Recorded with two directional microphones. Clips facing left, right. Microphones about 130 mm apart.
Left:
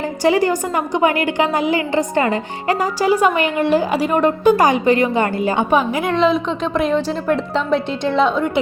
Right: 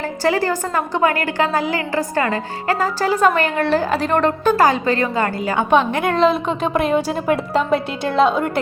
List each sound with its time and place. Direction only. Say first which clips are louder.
0.2 s a woman's voice: left 3 dB; 15° left (ahead or behind)
5.7 s a woman's voice: right 4 dB; 5° left (ahead or behind)